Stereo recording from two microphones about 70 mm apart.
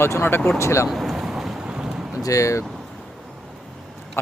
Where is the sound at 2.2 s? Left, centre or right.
Left.